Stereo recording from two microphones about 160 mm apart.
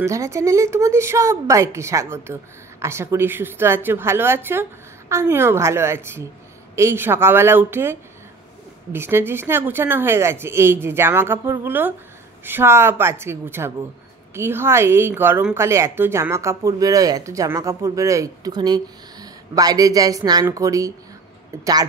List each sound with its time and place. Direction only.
0.0 s a woman's voice: 20° right (ahead or behind)